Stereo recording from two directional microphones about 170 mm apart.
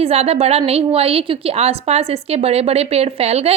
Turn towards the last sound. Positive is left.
turn(degrees=-35)  # may be behind; listen again after turning